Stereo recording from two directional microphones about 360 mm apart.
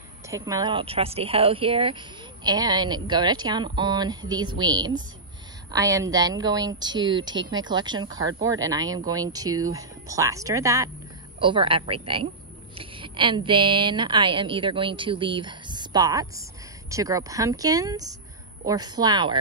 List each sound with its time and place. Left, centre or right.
0.3 s a woman's voice: centre
7.3 s speech: right
7.6 s a woman's voice: centre